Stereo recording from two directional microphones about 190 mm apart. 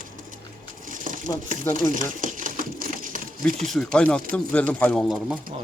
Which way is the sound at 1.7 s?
45° right (ahead or behind).